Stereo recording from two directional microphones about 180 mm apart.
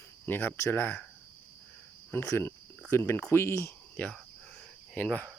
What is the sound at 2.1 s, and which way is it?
Speech, 15° left (ahead or behind).